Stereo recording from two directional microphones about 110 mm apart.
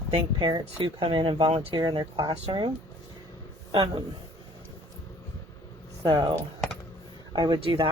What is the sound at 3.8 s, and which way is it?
Speech, 45° right (ahead or behind).